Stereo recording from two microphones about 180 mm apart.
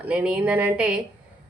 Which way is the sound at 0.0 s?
10° right (ahead or behind).